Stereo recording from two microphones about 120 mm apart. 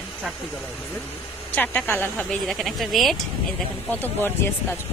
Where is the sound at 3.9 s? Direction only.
15° left (ahead or behind).